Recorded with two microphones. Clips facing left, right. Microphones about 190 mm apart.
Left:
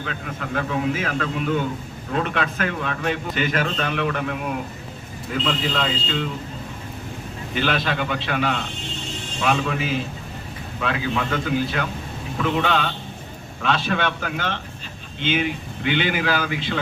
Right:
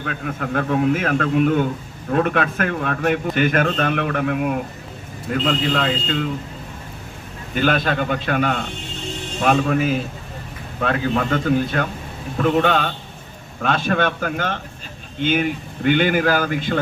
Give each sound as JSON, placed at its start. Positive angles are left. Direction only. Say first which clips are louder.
{"t": 0.0, "sound": "a man's voice", "louder": "right 4 dB", "side_deg": -50}
{"t": 7.5, "sound": "a man's voice", "louder": "right 4 dB", "side_deg": -45}